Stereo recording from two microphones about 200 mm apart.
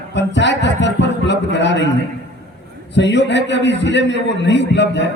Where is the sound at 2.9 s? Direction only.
60° left (ahead or behind).